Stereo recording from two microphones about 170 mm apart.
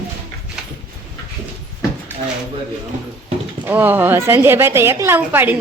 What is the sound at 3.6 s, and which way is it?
A woman's voice, 10° right (ahead or behind).